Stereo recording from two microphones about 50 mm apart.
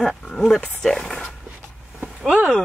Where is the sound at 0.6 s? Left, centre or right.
Centre.